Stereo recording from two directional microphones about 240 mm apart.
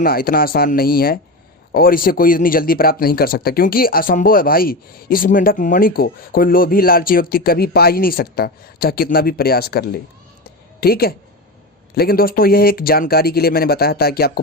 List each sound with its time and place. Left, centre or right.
0.0 s speech: left
10.4 s cat: left
11.9 s speech: left